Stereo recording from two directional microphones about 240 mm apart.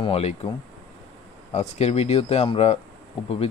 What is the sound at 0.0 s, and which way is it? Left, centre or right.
Speech, left.